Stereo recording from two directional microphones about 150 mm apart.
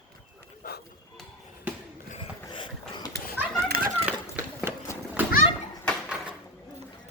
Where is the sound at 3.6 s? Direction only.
80° right.